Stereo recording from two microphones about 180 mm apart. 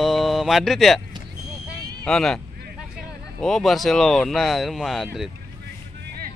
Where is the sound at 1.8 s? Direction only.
20° right (ahead or behind).